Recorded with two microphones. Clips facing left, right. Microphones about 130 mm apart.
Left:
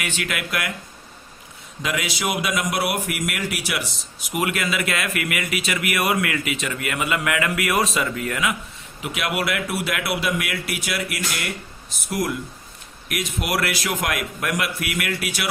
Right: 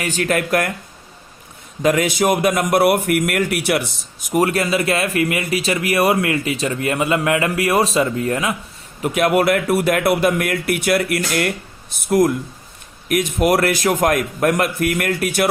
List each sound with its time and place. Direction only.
0.0 s a man's voice: 40° right (ahead or behind)
1.8 s a man's voice: 50° right (ahead or behind)
9.0 s a man's voice: 45° right (ahead or behind)